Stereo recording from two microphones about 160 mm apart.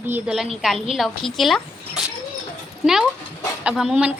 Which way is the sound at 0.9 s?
Centre (ahead or behind).